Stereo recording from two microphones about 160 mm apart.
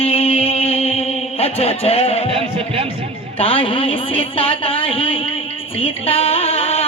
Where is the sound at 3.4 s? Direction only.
35° left (ahead or behind).